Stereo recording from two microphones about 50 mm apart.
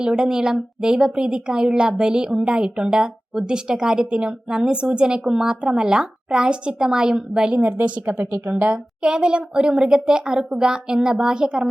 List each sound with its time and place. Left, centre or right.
0.0 s a woman's voice: centre
7.5 s speech: right
9.0 s a woman's voice: centre